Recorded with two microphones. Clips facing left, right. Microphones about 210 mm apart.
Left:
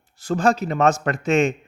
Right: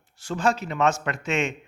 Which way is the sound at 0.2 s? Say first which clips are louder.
Left 5 dB; 40° left (ahead or behind).